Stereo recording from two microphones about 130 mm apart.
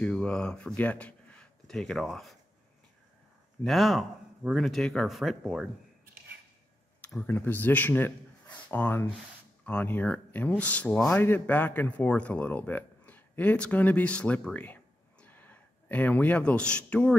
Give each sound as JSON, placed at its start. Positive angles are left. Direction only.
{"t": 0.0, "sound": "speech", "side_deg": 10}
{"t": 3.6, "sound": "speech", "side_deg": 0}
{"t": 7.0, "sound": "speech", "side_deg": 10}